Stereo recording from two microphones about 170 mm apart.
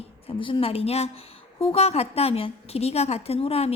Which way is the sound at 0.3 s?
30° left (ahead or behind).